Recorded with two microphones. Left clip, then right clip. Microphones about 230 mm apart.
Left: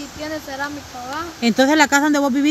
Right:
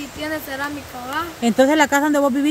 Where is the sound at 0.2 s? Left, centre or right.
Centre.